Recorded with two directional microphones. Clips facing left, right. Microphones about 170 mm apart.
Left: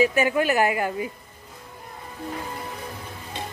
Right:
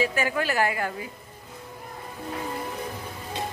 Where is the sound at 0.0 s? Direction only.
20° left (ahead or behind).